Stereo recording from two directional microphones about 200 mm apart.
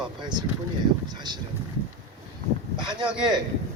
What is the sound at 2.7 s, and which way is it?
Speech, 25° right (ahead or behind).